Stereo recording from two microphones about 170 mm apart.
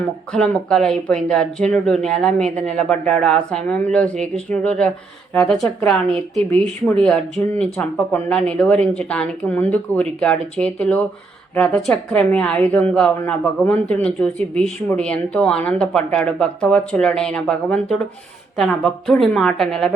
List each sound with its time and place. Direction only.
0.3 s a woman's voice: 5° left (ahead or behind)